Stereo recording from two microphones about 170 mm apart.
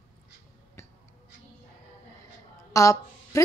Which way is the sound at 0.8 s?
15° left (ahead or behind).